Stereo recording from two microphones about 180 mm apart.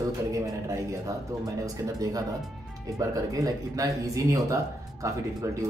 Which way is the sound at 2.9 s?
20° right (ahead or behind).